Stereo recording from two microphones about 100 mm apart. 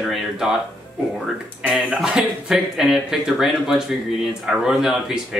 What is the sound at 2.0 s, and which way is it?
Speech, 5° right (ahead or behind).